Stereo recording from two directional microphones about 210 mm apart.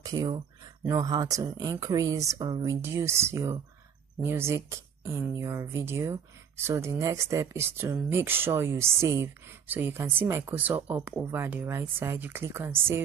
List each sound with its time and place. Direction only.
0.0 s speech: 20° right (ahead or behind)